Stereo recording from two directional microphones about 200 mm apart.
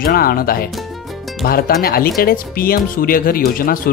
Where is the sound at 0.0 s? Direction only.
45° left (ahead or behind).